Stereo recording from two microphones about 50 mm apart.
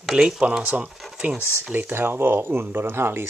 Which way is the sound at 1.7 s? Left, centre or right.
Right.